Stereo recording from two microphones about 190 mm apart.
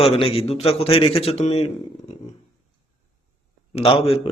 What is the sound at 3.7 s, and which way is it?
Speech, 30° left (ahead or behind).